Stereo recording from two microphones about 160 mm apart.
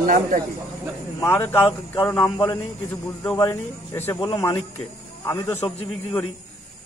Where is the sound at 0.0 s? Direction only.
55° right (ahead or behind).